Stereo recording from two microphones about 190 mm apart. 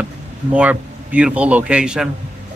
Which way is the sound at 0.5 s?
5° right (ahead or behind).